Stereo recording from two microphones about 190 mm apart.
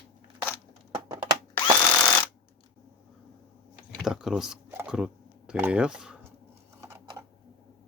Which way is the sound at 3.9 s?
5° right (ahead or behind).